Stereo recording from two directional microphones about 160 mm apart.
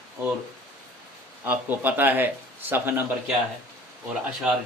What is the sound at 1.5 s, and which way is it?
Speech, 10° right (ahead or behind).